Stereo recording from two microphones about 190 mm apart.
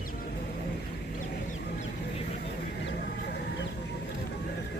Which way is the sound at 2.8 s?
60° left (ahead or behind).